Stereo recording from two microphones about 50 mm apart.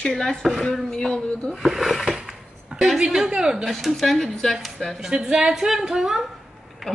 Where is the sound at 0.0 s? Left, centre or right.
Centre.